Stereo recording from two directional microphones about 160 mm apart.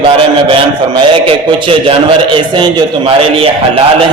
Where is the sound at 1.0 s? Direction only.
30° right (ahead or behind).